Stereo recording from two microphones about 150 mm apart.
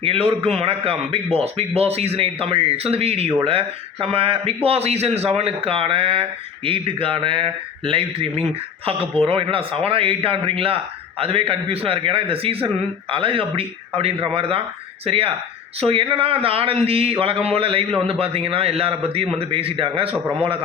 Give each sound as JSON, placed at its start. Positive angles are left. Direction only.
{"t": 0.0, "sound": "speech", "side_deg": -40}